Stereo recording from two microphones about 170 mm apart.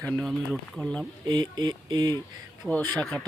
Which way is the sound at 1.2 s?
25° right (ahead or behind).